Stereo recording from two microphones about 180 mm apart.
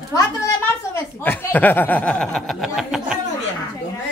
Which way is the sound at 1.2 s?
10° left (ahead or behind).